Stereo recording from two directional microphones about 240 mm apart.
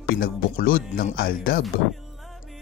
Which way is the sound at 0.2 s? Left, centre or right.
Left.